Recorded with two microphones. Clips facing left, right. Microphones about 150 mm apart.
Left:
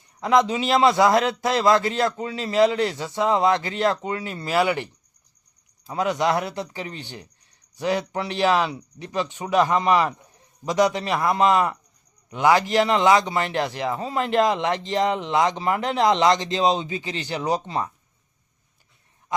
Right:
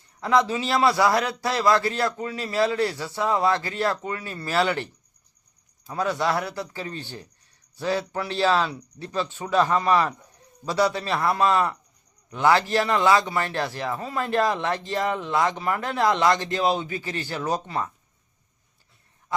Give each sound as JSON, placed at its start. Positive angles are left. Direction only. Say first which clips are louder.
{"t": 0.2, "sound": "a man's voice", "louder": "left 2 dB", "side_deg": 20}
{"t": 5.9, "sound": "a man's voice", "louder": "left 2 dB", "side_deg": 15}